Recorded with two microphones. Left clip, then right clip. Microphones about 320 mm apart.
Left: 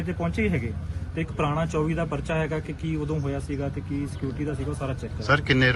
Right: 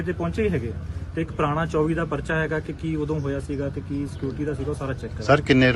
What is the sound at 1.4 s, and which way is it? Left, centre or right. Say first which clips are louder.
Speech: right 3 dB; centre.